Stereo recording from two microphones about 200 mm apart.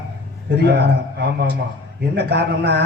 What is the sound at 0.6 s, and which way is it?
A man's voice, 55° right (ahead or behind).